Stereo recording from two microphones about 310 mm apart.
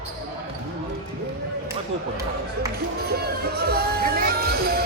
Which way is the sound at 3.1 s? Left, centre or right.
Right.